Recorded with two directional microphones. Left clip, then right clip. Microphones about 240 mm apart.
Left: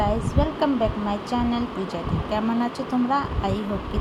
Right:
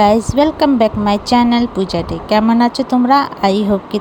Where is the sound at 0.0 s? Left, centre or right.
Right.